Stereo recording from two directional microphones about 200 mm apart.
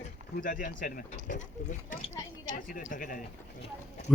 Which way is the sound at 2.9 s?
45° left (ahead or behind).